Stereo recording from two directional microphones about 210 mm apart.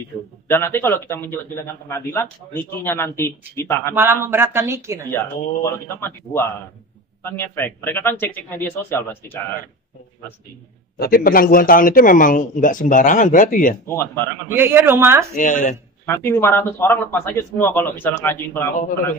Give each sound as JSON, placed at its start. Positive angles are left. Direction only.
{"t": 0.5, "sound": "a man's voice", "side_deg": 10}
{"t": 3.9, "sound": "speech", "side_deg": -10}
{"t": 5.1, "sound": "a man's voice", "side_deg": 10}
{"t": 11.0, "sound": "speech", "side_deg": 45}
{"t": 13.8, "sound": "a man's voice", "side_deg": 10}
{"t": 14.5, "sound": "speech", "side_deg": -10}
{"t": 15.3, "sound": "speech", "side_deg": 35}
{"t": 16.1, "sound": "a man's voice", "side_deg": 10}